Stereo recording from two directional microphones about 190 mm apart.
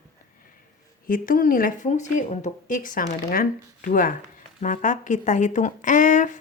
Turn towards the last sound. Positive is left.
turn(degrees=40)  # may be behind; listen again after turning